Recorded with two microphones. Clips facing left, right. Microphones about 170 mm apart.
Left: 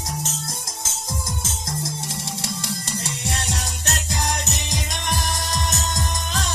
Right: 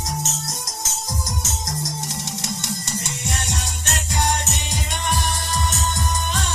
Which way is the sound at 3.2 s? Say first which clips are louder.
Even; 35° left (ahead or behind).